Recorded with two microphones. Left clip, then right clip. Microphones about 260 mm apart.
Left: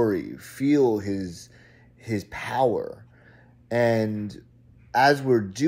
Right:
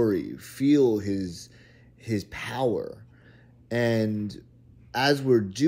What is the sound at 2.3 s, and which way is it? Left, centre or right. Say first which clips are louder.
Speech: left 5 dB; centre.